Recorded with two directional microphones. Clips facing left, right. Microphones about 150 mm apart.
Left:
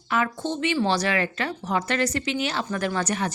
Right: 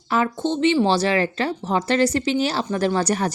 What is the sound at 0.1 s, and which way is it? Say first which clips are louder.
Speech: right 4 dB; 30° right (ahead or behind).